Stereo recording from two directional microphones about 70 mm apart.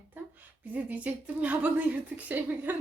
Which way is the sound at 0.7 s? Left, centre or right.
Right.